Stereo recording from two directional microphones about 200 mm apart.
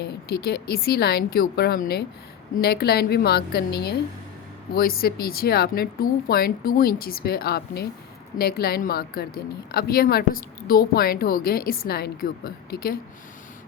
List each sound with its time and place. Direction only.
0.4 s a woman's voice: 50° left (ahead or behind)